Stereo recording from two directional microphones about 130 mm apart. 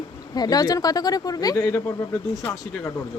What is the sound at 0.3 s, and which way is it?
Speech, 30° left (ahead or behind).